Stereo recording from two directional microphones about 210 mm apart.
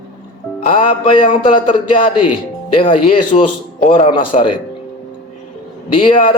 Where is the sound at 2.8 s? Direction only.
25° left (ahead or behind).